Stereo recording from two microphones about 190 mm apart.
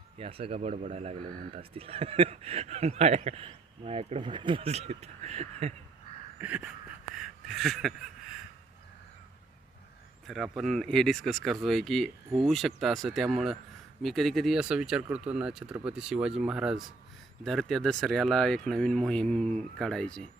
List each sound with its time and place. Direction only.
0.2 s speech: 30° right (ahead or behind)
6.4 s a sound: 5° right (ahead or behind)
10.2 s speech: centre (ahead or behind)